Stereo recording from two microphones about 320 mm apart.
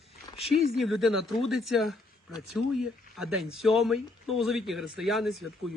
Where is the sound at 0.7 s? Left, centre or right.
Centre.